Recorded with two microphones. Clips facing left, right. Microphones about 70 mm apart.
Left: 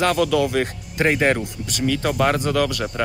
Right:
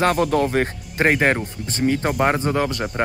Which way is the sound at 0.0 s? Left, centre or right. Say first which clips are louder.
Even; right.